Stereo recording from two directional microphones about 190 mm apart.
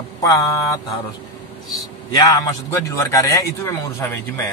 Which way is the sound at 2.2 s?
15° left (ahead or behind).